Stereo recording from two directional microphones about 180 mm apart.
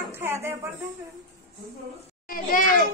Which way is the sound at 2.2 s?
50° left (ahead or behind).